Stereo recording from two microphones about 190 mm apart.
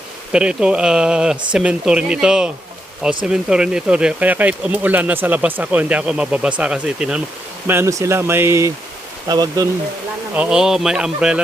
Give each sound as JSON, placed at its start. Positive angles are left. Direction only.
{"t": 0.3, "sound": "speech", "side_deg": -5}
{"t": 7.7, "sound": "speech", "side_deg": -15}
{"t": 10.3, "sound": "speech", "side_deg": -5}